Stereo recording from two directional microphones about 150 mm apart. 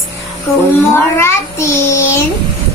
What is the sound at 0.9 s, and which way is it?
A child's voice, 15° left (ahead or behind).